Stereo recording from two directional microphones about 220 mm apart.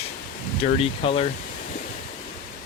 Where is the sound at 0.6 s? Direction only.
25° left (ahead or behind).